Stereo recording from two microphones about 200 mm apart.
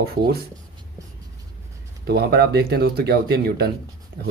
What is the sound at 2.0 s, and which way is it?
Speech, 55° right (ahead or behind).